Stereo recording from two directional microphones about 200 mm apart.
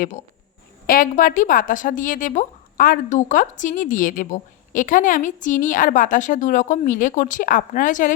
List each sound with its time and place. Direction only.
0.9 s a woman's voice: 45° left (ahead or behind)